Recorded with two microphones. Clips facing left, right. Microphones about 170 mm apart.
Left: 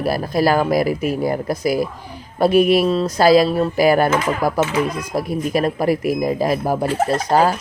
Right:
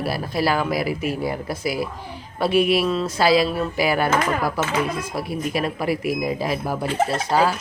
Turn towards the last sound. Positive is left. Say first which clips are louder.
# left 3 dB
turn(degrees=45)  # may be behind; listen again after turning